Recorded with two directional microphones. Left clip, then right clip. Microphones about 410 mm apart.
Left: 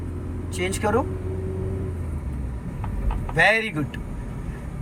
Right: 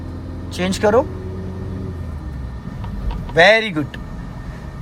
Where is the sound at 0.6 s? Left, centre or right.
Centre.